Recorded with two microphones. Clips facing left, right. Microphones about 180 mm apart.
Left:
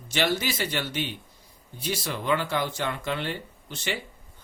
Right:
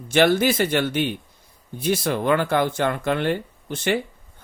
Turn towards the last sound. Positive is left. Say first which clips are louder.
# right 9 dB
turn(degrees=-55)  # may be behind; listen again after turning